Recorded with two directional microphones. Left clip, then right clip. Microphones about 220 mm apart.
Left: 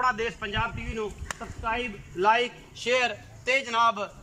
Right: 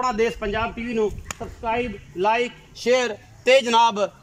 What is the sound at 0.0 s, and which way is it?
Speech, 20° right (ahead or behind).